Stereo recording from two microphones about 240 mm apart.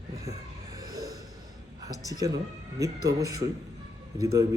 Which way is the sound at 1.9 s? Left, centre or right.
Centre.